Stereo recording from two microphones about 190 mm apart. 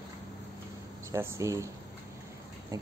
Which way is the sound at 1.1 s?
15° right (ahead or behind).